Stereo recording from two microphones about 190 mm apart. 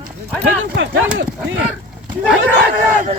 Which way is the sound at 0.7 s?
65° right (ahead or behind).